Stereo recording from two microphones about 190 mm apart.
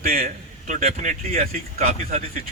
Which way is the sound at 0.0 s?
50° right (ahead or behind).